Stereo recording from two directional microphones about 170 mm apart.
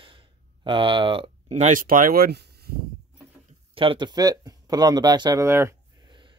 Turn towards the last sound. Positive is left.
turn(degrees=-30)  # may be behind; listen again after turning